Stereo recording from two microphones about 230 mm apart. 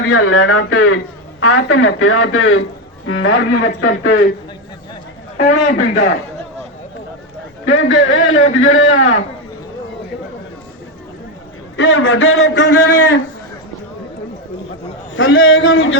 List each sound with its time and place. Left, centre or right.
0.1 s a man's voice: left
3.8 s speech: left
5.4 s a man's voice: left
7.6 s a man's voice: left
11.8 s a man's voice: left
15.1 s a man's voice: left